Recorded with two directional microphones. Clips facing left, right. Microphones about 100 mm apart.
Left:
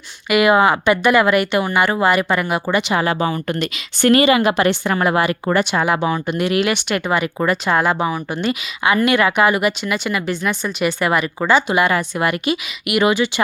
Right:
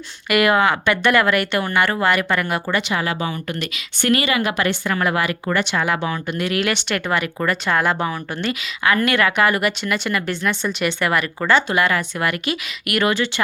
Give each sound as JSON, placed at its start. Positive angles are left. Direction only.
{"t": 0.3, "sound": "speech", "side_deg": 5}
{"t": 0.5, "sound": "speech", "side_deg": 15}
{"t": 2.9, "sound": "a woman's voice", "side_deg": 30}
{"t": 5.5, "sound": "a woman's voice", "side_deg": 15}
{"t": 6.6, "sound": "speech", "side_deg": 10}